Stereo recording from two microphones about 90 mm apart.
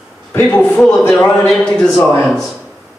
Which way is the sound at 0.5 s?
20° left (ahead or behind).